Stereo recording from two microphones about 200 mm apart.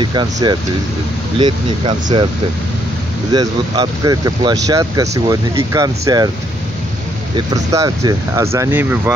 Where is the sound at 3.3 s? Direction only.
20° right (ahead or behind).